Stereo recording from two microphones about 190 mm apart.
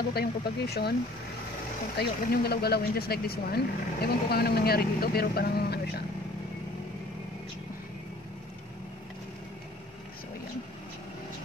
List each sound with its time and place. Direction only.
0.1 s speech: 55° left (ahead or behind)
2.0 s speech: 55° left (ahead or behind)